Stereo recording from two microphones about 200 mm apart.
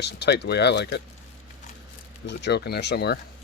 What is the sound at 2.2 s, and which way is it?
Speech, 55° left (ahead or behind).